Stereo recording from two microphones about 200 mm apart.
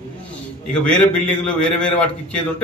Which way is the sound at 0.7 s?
5° left (ahead or behind).